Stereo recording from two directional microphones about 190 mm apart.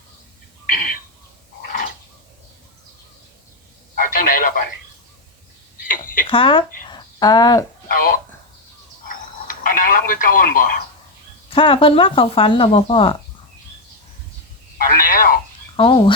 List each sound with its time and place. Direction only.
3.9 s telephone: 45° left (ahead or behind)
6.2 s speech: 30° left (ahead or behind)
7.9 s speech: 50° left (ahead or behind)
9.5 s speech: 45° left (ahead or behind)
11.4 s speech: 25° left (ahead or behind)
14.8 s a sound: 50° left (ahead or behind)
15.7 s speech: 30° left (ahead or behind)